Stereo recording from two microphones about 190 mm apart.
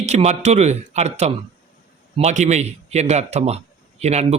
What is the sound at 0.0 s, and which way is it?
A man's voice, 35° right (ahead or behind).